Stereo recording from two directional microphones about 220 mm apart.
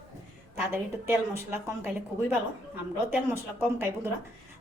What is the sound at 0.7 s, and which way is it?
A woman's voice, 10° right (ahead or behind).